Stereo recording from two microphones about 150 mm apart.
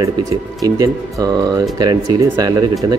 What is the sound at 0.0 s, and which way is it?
Speech, 25° right (ahead or behind).